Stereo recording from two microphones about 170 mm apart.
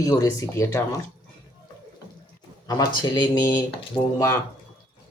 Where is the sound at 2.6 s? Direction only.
25° left (ahead or behind).